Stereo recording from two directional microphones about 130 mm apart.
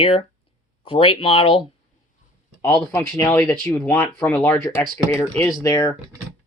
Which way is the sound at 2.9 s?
20° left (ahead or behind).